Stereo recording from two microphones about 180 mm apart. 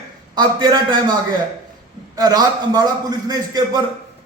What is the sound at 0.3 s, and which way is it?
Speech, 25° right (ahead or behind).